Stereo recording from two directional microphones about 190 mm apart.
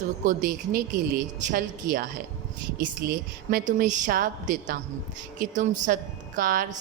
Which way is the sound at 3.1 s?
45° right (ahead or behind).